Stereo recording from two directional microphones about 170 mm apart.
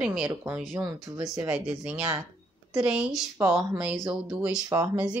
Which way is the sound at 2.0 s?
20° right (ahead or behind).